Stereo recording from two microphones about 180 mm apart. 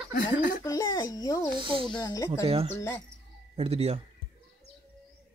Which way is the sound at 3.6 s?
35° right (ahead or behind).